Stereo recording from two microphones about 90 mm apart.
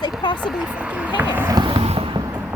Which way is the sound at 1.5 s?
60° right (ahead or behind).